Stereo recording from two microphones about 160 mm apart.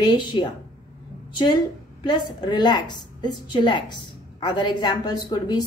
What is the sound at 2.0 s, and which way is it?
A woman's voice, 25° left (ahead or behind).